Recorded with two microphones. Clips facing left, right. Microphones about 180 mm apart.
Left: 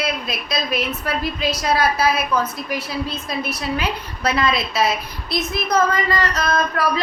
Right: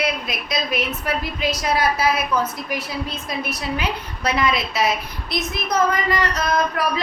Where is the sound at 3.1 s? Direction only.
20° right (ahead or behind).